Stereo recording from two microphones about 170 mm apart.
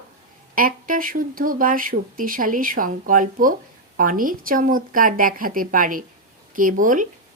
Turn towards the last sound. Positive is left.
turn(degrees=-50)  # may be behind; listen again after turning